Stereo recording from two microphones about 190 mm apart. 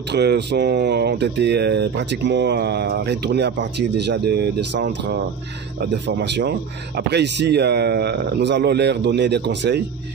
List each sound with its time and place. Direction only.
0.1 s speech: 60° right (ahead or behind)